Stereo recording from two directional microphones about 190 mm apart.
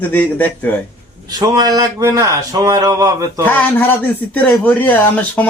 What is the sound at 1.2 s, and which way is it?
A man's voice, 20° right (ahead or behind).